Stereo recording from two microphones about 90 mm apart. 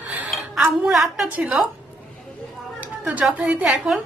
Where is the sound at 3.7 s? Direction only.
Centre (ahead or behind).